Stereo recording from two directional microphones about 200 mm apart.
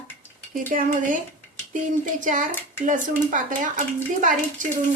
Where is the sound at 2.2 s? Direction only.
40° right (ahead or behind).